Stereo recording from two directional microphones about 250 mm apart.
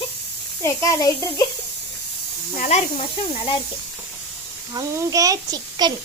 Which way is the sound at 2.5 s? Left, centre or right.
Left.